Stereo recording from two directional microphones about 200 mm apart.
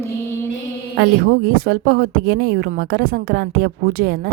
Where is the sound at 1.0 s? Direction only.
45° right (ahead or behind).